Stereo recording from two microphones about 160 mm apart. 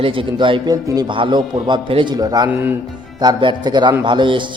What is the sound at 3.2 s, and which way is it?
A man's voice, 30° right (ahead or behind).